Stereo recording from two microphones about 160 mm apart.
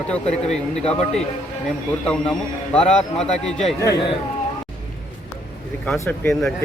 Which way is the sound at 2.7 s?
5° left (ahead or behind).